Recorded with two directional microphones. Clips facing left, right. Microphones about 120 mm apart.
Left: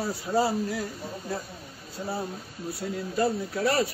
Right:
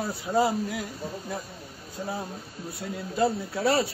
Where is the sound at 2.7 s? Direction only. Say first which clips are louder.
Left 1 dB; 20° right (ahead or behind).